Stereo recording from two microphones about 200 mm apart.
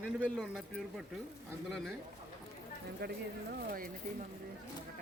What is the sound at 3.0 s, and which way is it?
Speech, 55° right (ahead or behind).